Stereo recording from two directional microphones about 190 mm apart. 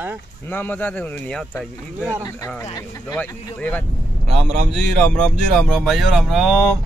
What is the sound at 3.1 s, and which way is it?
Speech, 10° left (ahead or behind).